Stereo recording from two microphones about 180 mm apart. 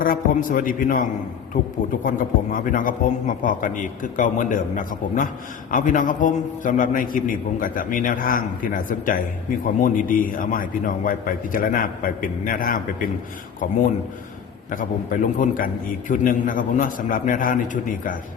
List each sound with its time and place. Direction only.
0.0 s a man's voice: 50° left (ahead or behind)
14.7 s a man's voice: 50° left (ahead or behind)